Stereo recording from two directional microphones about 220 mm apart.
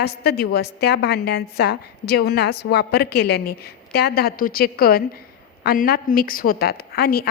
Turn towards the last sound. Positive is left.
turn(degrees=45)  # may be behind; listen again after turning